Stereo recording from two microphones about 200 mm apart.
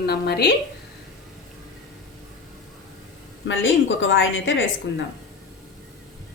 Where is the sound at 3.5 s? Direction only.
70° left (ahead or behind).